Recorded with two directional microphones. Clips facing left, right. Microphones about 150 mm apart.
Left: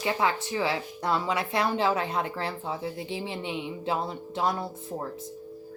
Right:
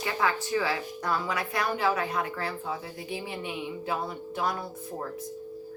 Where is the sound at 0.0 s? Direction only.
20° left (ahead or behind).